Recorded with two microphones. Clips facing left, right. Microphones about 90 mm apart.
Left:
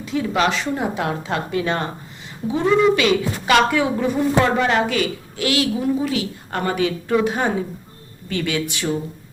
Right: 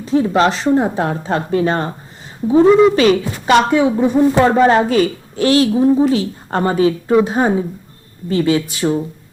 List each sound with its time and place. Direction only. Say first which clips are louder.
0.0 s a woman's voice: right 6 dB; 35° right (ahead or behind)
2.6 s speech: right 5 dB; 20° right (ahead or behind)
2.9 s a woman's voice: right 5 dB; 35° right (ahead or behind)